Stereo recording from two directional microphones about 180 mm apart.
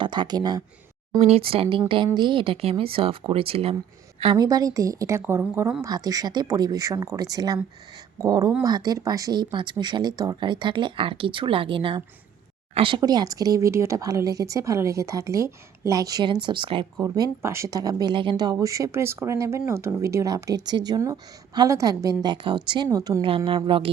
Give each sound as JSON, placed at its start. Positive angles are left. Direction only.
{"t": 0.0, "sound": "speech", "side_deg": -25}
{"t": 1.2, "sound": "speech", "side_deg": -35}